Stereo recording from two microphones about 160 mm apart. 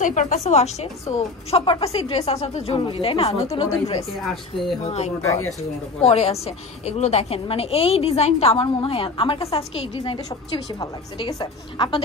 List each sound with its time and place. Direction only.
0.0 s a woman's voice: 50° left (ahead or behind); by 12.0 s 25° left (ahead or behind)